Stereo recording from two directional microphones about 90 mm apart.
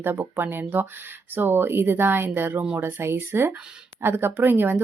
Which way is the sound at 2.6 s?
15° right (ahead or behind).